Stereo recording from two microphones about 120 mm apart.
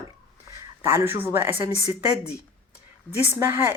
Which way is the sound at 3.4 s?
20° right (ahead or behind).